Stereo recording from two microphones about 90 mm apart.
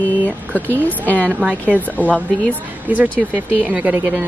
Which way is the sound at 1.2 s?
15° right (ahead or behind).